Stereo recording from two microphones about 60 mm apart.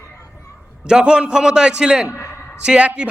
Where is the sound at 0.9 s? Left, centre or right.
Centre.